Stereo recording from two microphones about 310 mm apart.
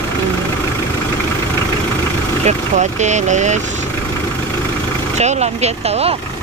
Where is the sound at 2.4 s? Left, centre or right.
Right.